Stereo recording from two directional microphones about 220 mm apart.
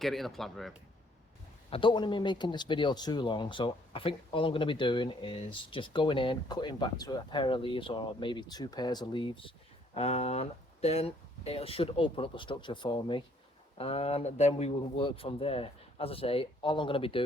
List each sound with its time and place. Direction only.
0.0 s speech: centre (ahead or behind)
1.7 s speech: 20° left (ahead or behind)